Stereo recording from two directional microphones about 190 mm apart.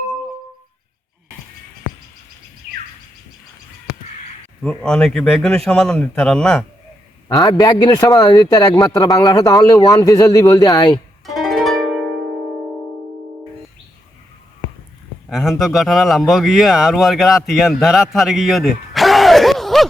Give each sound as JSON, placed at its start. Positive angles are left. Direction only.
{"t": 4.6, "sound": "a man's voice", "side_deg": 5}
{"t": 7.3, "sound": "a man's voice", "side_deg": 20}
{"t": 11.4, "sound": "music", "side_deg": 0}
{"t": 15.3, "sound": "speech", "side_deg": 0}